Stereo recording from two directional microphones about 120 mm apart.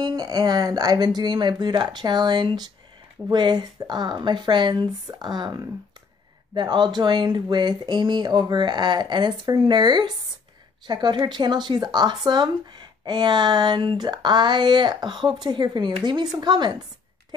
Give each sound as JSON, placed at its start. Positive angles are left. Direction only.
{"t": 0.0, "sound": "speech", "side_deg": -35}